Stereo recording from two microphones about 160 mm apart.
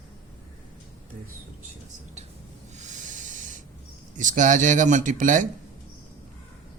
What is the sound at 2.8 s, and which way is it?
Hiss, 50° right (ahead or behind).